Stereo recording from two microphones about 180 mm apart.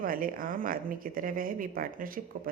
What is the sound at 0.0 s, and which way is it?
A man's voice, 50° right (ahead or behind).